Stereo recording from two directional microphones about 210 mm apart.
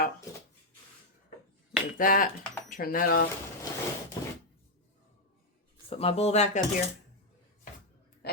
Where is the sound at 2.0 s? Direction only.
40° left (ahead or behind).